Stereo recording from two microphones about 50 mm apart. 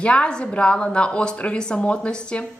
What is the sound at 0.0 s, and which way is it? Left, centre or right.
Speech, left.